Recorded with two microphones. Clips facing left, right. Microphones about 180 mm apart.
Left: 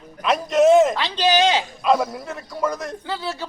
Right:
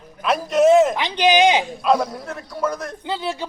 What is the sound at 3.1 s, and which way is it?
Speech, 20° right (ahead or behind).